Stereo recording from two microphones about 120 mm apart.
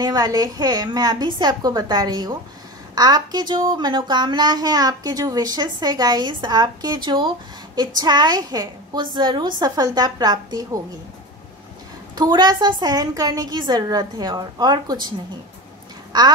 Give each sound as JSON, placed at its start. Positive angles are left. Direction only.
{"t": 0.0, "sound": "a woman's voice", "side_deg": -35}
{"t": 12.2, "sound": "a woman's voice", "side_deg": -35}